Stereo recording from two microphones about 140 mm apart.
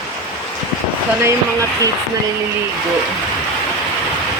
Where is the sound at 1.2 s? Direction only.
20° right (ahead or behind).